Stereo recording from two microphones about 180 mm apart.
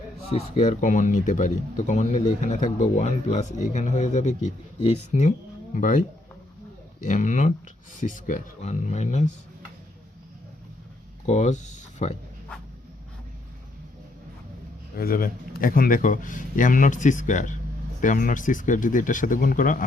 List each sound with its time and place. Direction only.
0.3 s speech: 45° left (ahead or behind)
11.3 s speech: 40° left (ahead or behind)
14.9 s speech: 55° left (ahead or behind)